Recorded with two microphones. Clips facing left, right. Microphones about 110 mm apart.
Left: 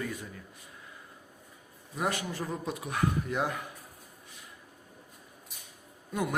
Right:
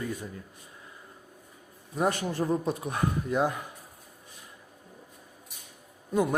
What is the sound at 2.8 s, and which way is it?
Speech, 30° right (ahead or behind).